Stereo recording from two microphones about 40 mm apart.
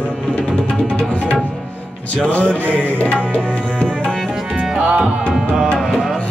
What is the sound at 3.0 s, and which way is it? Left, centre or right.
Tabla, left.